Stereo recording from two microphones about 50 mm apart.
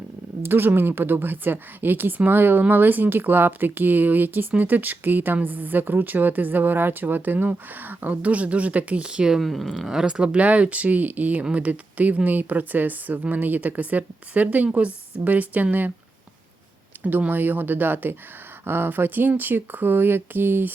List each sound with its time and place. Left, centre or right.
0.4 s a woman's voice: right; by 9.4 s centre
9.4 s speech: centre
9.8 s a woman's voice: centre; by 15.9 s right
17.0 s a woman's voice: right